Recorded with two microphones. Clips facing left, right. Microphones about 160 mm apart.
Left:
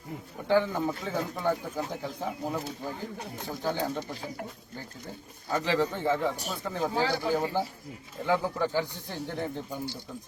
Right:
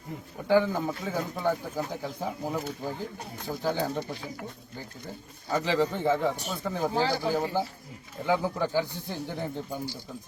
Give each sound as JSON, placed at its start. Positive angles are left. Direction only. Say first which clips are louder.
{"t": 0.4, "sound": "speech", "louder": "right 1 dB", "side_deg": -10}
{"t": 5.5, "sound": "speech", "louder": "right 1 dB", "side_deg": -15}
{"t": 6.4, "sound": "speech", "louder": "right 1 dB", "side_deg": 0}